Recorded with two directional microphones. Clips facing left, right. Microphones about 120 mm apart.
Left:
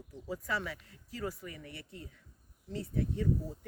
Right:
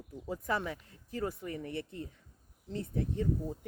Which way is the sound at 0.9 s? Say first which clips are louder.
Right 4 dB; 25° right (ahead or behind).